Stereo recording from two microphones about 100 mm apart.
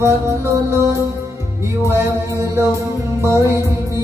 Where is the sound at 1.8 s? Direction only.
30° right (ahead or behind).